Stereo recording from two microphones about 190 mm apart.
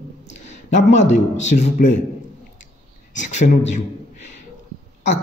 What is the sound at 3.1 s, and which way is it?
Speech, 40° left (ahead or behind).